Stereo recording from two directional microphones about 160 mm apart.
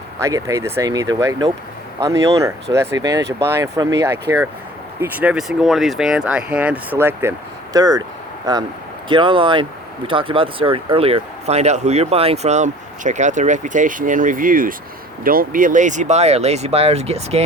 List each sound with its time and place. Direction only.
0.2 s speech: 20° right (ahead or behind); by 17.4 s 40° right (ahead or behind)